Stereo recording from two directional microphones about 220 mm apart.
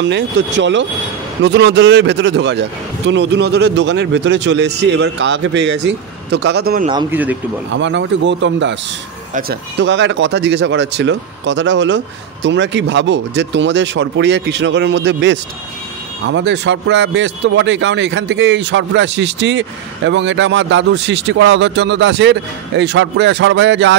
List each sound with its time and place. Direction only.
0.0 s speech: 55° right (ahead or behind)
6.9 s speech: 20° right (ahead or behind)
7.7 s speech: 55° right (ahead or behind)